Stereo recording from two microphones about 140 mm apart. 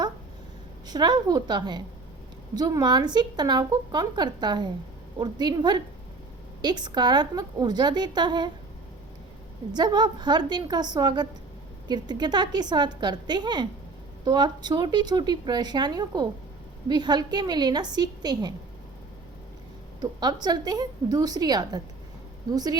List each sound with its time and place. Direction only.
0.9 s a woman's voice: 30° right (ahead or behind)
9.7 s a woman's voice: 30° right (ahead or behind)
20.0 s speech: 30° right (ahead or behind)